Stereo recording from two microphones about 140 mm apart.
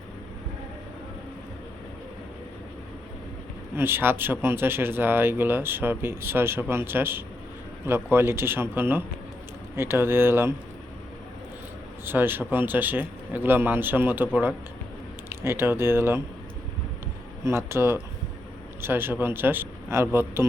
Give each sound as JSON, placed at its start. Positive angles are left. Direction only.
{"t": 3.8, "sound": "speech", "side_deg": -15}
{"t": 12.0, "sound": "speech", "side_deg": -15}
{"t": 15.3, "sound": "speech", "side_deg": -15}
{"t": 17.4, "sound": "a man's voice", "side_deg": -20}